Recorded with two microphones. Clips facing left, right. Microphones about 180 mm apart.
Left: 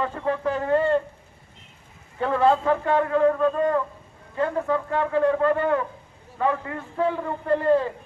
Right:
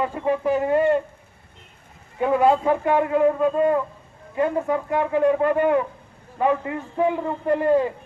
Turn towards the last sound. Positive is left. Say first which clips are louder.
# right 1 dB
turn(degrees=-15)  # may be behind; listen again after turning